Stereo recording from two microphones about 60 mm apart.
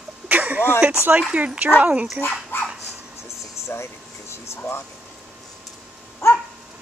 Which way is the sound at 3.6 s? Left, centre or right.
Left.